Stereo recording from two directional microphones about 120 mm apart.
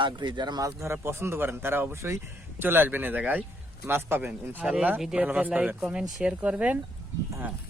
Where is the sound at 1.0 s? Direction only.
20° right (ahead or behind).